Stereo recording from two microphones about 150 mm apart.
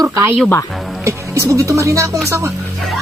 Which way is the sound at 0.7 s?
Centre (ahead or behind).